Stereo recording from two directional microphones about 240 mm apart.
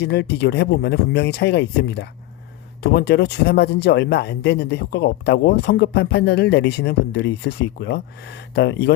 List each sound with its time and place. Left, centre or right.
0.0 s speech: left